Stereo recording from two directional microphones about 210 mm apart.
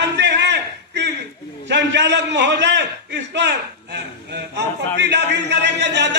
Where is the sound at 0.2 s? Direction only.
55° right (ahead or behind).